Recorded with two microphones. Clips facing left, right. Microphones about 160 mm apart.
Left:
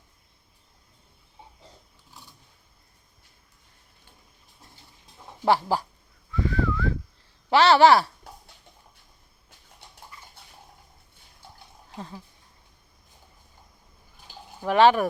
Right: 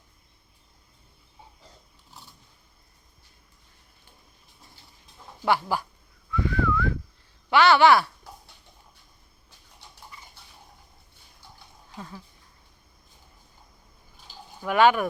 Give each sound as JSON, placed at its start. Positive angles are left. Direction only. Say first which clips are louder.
{"t": 5.5, "sound": "speech", "louder": "left 2 dB", "side_deg": 35}
{"t": 6.3, "sound": "whistling", "louder": "right 1 dB", "side_deg": 35}
{"t": 7.5, "sound": "speech", "louder": "left 1 dB", "side_deg": 35}
{"t": 11.9, "sound": "speech", "louder": "left 2 dB", "side_deg": 25}
{"t": 14.6, "sound": "speech", "louder": "left 2 dB", "side_deg": 35}